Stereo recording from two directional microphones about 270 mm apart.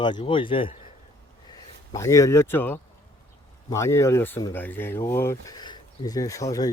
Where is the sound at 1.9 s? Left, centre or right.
Centre.